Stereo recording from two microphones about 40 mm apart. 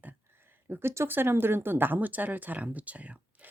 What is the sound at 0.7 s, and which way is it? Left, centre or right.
Speech, right.